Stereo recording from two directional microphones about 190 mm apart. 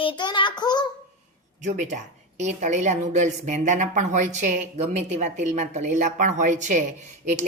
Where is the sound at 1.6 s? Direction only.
40° right (ahead or behind).